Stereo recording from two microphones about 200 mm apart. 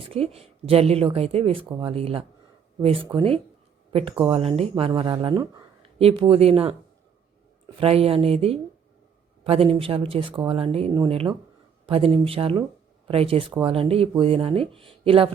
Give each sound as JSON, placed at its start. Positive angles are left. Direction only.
{"t": 0.1, "sound": "speech", "side_deg": -30}
{"t": 6.0, "sound": "speech", "side_deg": -30}
{"t": 7.8, "sound": "speech", "side_deg": -30}